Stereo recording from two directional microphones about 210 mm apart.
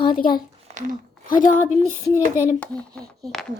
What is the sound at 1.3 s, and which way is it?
Speech, 40° left (ahead or behind).